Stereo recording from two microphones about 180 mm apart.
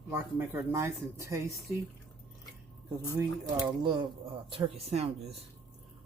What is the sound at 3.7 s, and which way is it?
Speech, 25° right (ahead or behind).